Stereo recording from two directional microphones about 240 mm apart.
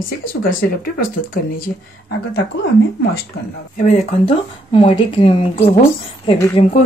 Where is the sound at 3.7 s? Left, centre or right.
Left.